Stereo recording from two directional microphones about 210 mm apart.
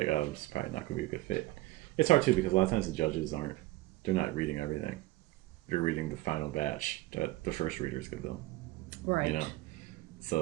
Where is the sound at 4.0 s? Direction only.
35° left (ahead or behind).